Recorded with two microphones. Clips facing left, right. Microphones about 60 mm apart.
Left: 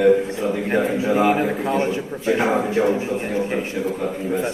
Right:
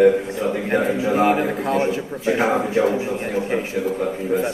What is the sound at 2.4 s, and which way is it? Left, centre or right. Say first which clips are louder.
A man's voice: right 1 dB; right.